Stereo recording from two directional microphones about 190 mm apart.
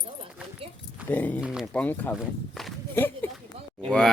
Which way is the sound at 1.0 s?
10° left (ahead or behind).